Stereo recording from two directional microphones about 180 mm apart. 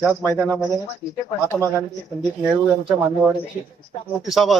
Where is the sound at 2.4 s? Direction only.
5° right (ahead or behind).